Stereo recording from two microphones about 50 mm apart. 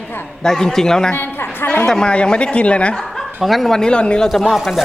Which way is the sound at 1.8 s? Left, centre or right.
Centre.